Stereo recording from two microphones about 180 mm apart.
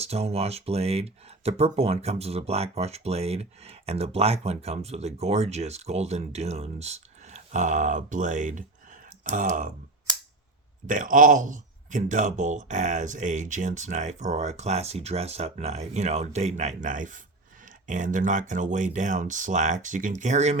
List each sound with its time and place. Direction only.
0.0 s speech: 35° right (ahead or behind)
10.8 s speech: 45° right (ahead or behind)